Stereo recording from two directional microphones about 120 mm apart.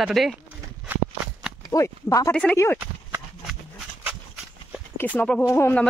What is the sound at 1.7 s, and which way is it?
Speech, 30° left (ahead or behind).